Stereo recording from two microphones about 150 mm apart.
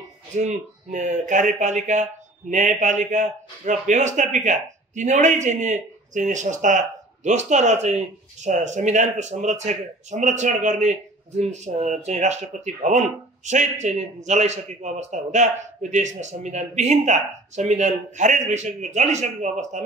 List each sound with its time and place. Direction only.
0.4 s speech: 50° right (ahead or behind)